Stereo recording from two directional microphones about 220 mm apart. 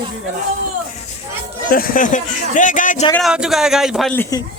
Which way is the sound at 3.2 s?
Centre (ahead or behind).